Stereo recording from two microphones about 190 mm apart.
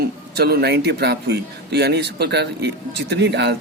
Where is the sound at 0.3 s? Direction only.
55° right (ahead or behind).